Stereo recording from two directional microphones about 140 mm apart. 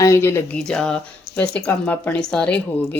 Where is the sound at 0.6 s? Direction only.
5° left (ahead or behind).